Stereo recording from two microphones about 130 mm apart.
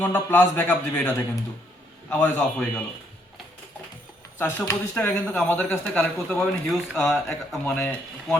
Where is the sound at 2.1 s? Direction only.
15° left (ahead or behind).